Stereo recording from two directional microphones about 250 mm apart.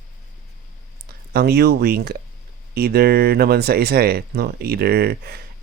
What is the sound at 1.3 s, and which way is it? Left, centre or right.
Speech, right.